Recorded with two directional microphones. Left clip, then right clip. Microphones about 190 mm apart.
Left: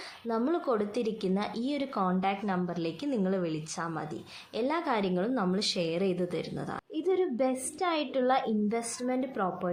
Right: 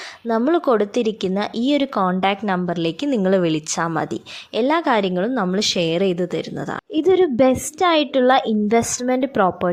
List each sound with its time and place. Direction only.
0.3 s a woman's voice: 45° right (ahead or behind)